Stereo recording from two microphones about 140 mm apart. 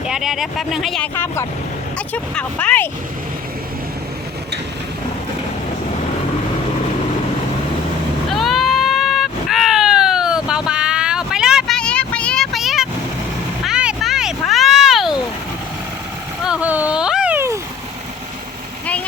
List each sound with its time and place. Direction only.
0.1 s speech: 5° right (ahead or behind)
1.1 s speech: 15° left (ahead or behind)
8.3 s baby cry: centre (ahead or behind)
11.8 s vehicle: 5° left (ahead or behind)
13.7 s a sound: 5° right (ahead or behind)
16.4 s vehicle: 5° right (ahead or behind)